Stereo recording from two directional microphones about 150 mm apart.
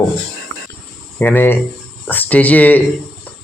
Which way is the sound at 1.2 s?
15° left (ahead or behind).